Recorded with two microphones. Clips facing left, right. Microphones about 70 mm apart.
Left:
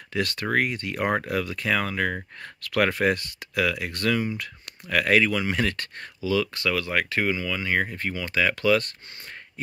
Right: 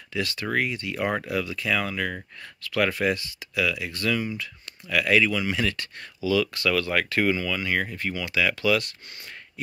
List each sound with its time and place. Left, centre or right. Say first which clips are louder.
0.1 s speech: left 2 dB; left
2.6 s speech: left 2 dB; left